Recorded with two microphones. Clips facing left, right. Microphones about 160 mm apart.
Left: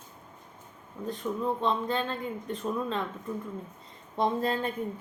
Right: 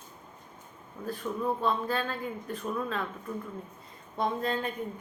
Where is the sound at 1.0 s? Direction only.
20° left (ahead or behind).